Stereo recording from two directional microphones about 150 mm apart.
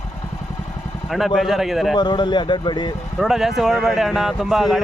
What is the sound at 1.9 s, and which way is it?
Speech, 30° left (ahead or behind).